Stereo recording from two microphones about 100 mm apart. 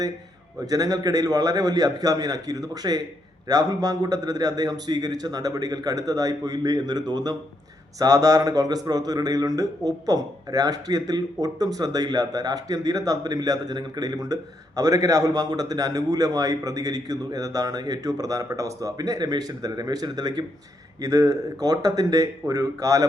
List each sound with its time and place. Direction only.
0.6 s speech: 35° right (ahead or behind)